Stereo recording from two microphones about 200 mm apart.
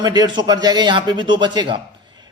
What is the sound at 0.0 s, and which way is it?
Speech, 20° right (ahead or behind).